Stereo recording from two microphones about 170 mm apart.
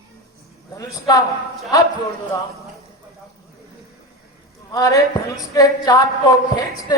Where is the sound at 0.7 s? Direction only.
20° left (ahead or behind).